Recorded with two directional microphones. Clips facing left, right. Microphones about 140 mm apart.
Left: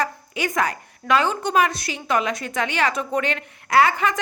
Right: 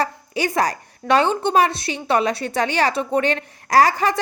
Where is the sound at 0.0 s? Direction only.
35° right (ahead or behind).